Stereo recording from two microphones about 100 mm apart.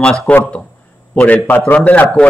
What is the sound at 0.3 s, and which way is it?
A man's voice, 10° left (ahead or behind).